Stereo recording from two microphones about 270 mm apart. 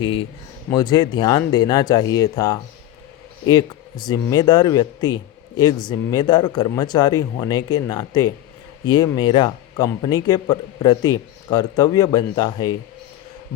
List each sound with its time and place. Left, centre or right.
0.0 s speech: centre